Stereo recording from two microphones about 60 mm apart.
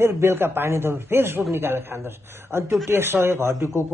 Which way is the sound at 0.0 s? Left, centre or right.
Right.